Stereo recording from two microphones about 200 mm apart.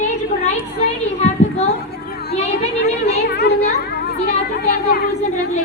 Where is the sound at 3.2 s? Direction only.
55° left (ahead or behind).